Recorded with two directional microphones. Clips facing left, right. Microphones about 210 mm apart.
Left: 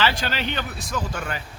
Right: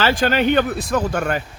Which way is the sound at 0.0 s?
50° right (ahead or behind).